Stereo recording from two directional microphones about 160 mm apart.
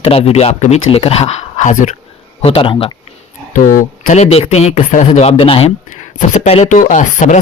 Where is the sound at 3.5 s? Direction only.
55° left (ahead or behind); by 5.7 s 35° left (ahead or behind).